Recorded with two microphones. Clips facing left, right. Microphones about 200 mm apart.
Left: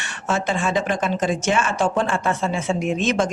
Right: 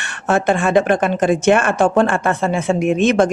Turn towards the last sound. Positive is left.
turn(degrees=-60)  # may be behind; listen again after turning